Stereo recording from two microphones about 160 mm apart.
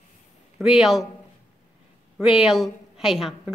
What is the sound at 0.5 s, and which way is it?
Speech, centre (ahead or behind).